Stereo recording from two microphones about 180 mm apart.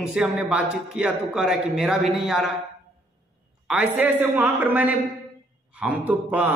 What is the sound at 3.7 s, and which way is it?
A man's voice, 10° right (ahead or behind).